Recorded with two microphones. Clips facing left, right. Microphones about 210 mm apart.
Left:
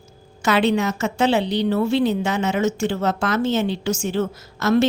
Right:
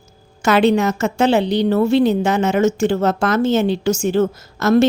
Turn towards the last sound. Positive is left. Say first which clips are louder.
# right 4 dB
turn(degrees=-45)  # may be behind; listen again after turning